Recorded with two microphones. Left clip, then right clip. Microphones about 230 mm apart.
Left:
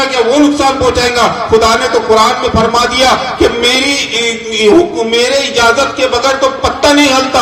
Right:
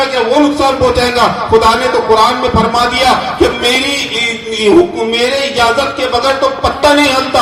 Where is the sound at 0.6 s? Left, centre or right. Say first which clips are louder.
Even; left.